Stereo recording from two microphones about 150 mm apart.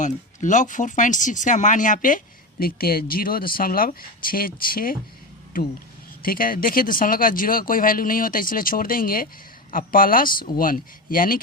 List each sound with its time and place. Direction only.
0.0 s speech: 55° left (ahead or behind); by 4.9 s 70° left (ahead or behind)
6.2 s speech: 70° left (ahead or behind)